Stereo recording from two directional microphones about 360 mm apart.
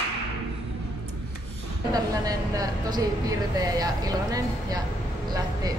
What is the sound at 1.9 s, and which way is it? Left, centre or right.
A woman's voice, centre.